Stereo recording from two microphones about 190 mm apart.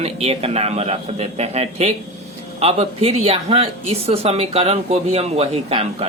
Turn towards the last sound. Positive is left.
turn(degrees=-30)  # may be behind; listen again after turning